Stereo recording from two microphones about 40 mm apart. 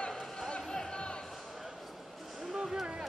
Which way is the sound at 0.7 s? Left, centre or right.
Left.